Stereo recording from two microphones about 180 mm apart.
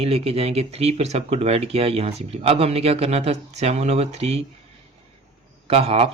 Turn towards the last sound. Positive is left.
turn(degrees=-35)  # may be behind; listen again after turning